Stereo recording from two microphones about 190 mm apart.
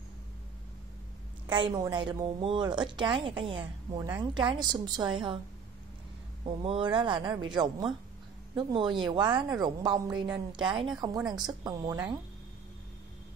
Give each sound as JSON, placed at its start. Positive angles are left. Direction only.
{"t": 1.5, "sound": "speech", "side_deg": -20}
{"t": 6.4, "sound": "speech", "side_deg": -25}